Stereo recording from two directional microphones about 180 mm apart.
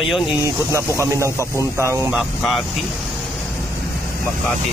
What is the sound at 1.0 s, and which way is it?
Speech, 15° right (ahead or behind).